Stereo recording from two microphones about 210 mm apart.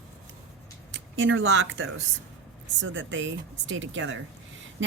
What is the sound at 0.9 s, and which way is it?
A woman's voice, 60° right (ahead or behind).